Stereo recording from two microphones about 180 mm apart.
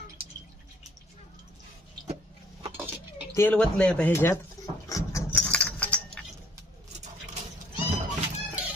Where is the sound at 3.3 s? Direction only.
10° left (ahead or behind).